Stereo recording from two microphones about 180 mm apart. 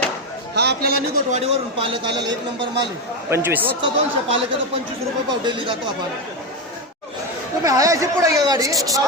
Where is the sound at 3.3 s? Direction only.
10° right (ahead or behind).